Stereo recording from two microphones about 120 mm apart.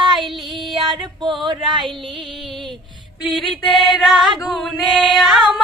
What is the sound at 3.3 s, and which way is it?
Female singing, centre (ahead or behind).